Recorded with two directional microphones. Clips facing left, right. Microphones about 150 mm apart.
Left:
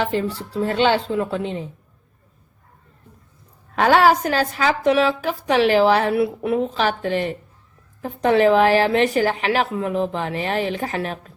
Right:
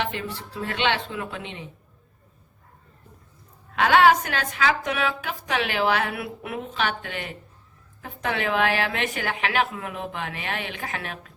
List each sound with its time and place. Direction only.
0.0 s a woman's voice: 35° left (ahead or behind)
3.8 s a woman's voice: 40° left (ahead or behind)